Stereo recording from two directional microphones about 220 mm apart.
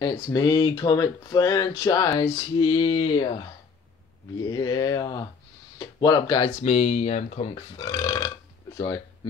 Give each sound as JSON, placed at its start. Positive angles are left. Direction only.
{"t": 0.0, "sound": "speech", "side_deg": 15}
{"t": 6.6, "sound": "speech", "side_deg": 30}